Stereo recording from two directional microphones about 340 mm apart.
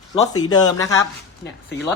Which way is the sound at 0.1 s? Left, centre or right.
Centre.